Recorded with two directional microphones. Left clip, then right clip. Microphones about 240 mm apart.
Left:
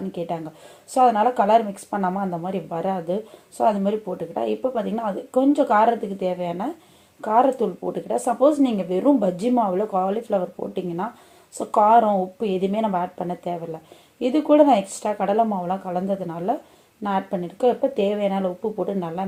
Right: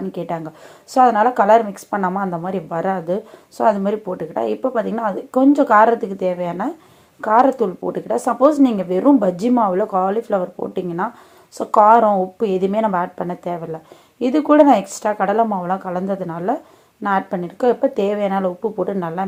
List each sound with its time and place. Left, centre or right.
0.1 s speech: right